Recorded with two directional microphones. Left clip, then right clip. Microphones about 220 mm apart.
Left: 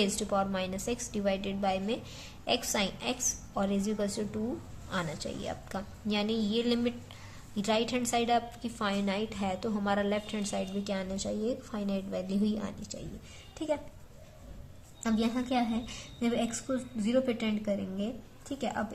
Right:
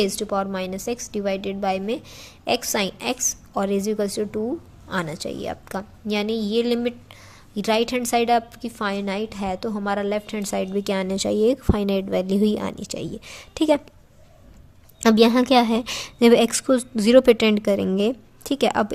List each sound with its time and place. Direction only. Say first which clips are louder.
0.0 s a woman's voice: right 7 dB; 25° right (ahead or behind); by 13.8 s 45° right (ahead or behind)
15.0 s a woman's voice: right 16 dB; 45° right (ahead or behind)